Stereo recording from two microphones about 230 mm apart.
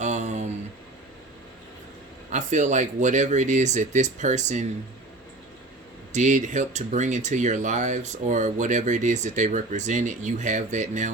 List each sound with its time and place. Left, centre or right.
0.0 s a sound: right
2.3 s speech: right
6.1 s speech: right